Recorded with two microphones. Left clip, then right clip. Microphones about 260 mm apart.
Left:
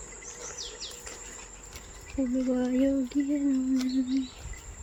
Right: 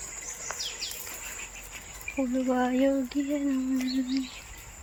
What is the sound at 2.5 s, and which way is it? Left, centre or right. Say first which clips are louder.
Speech: right 3 dB; centre.